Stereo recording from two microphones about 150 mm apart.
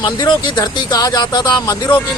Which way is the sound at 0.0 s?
25° left (ahead or behind).